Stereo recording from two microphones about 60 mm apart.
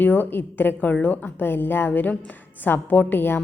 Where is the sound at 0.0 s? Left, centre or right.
Left.